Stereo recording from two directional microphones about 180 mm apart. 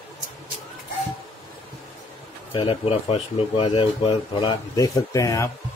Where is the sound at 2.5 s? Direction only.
30° left (ahead or behind).